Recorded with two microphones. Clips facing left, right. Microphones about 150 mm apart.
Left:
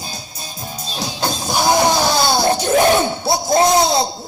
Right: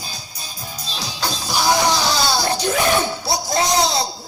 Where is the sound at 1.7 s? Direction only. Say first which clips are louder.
Left 5 dB; 50° left (ahead or behind).